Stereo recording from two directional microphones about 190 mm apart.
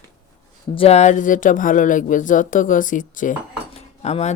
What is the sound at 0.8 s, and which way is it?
Speech, 35° left (ahead or behind).